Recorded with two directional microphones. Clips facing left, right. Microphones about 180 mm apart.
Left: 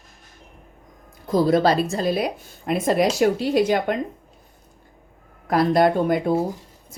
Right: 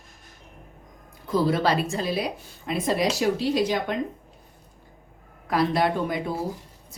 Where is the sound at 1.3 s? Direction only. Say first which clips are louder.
Left 5 dB; 40° left (ahead or behind).